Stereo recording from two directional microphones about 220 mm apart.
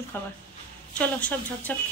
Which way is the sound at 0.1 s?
10° left (ahead or behind).